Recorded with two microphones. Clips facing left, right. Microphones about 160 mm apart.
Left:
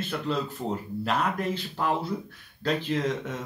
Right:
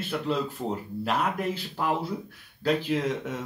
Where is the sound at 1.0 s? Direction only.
10° right (ahead or behind).